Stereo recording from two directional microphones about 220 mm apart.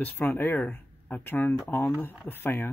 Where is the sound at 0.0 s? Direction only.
10° left (ahead or behind).